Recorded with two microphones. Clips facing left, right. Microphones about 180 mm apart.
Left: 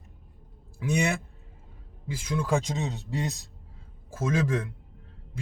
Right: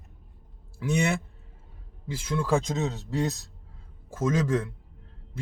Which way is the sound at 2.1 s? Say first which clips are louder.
Right 1 dB; 15° left (ahead or behind).